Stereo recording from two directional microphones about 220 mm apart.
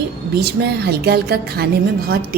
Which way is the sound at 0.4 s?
50° right (ahead or behind).